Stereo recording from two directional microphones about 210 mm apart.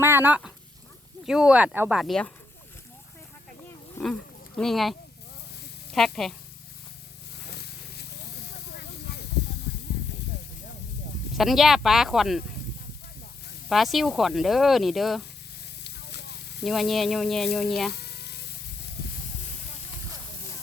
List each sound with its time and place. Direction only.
0.0 s speech: 10° right (ahead or behind)
3.9 s speech: 5° left (ahead or behind)
7.5 s a sound: 50° left (ahead or behind)
9.1 s snake: 50° left (ahead or behind)
11.3 s speech: centre (ahead or behind)
13.7 s speech: centre (ahead or behind)
15.8 s a sound: 50° left (ahead or behind)
16.6 s speech: centre (ahead or behind)
17.9 s electric toothbrush: 50° left (ahead or behind)